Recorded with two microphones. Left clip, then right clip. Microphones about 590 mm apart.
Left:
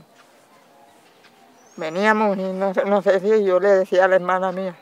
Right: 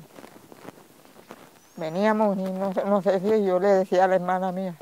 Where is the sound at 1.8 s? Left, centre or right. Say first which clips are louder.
Left 4 dB; right.